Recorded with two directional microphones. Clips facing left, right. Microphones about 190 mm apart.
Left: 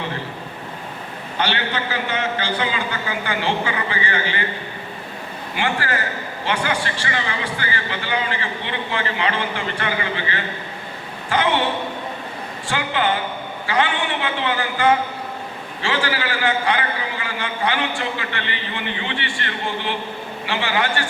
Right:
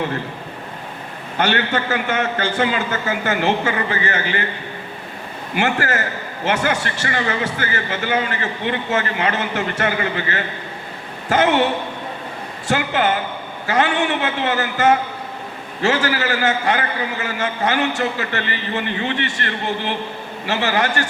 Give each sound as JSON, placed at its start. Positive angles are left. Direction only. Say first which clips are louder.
{"t": 1.4, "sound": "a man's voice", "louder": "right 4 dB", "side_deg": -45}
{"t": 5.5, "sound": "a man's voice", "louder": "right 3 dB", "side_deg": -45}
{"t": 12.6, "sound": "a man's voice", "louder": "right 3 dB", "side_deg": -45}
{"t": 20.5, "sound": "a man's voice", "louder": "right 3 dB", "side_deg": -40}